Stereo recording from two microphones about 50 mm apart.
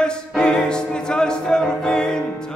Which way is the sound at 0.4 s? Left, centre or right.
Centre.